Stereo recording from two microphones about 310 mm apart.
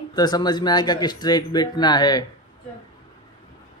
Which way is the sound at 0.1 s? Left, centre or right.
Centre.